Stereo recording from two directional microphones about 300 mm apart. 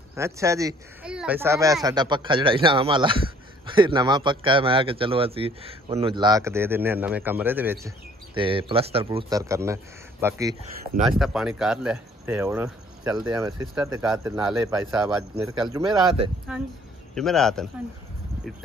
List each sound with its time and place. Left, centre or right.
0.1 s speech: centre
8.4 s speech: centre
16.5 s a man's voice: centre